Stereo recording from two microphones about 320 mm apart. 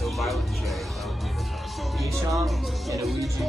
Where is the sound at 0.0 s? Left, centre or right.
Centre.